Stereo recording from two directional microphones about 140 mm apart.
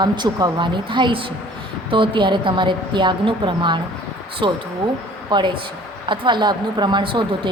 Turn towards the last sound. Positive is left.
turn(degrees=-35)  # may be behind; listen again after turning